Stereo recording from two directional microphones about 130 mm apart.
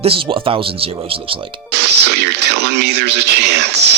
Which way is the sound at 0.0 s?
45° right (ahead or behind).